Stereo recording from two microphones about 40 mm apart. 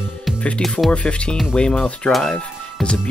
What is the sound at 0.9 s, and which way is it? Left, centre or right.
Speech, left.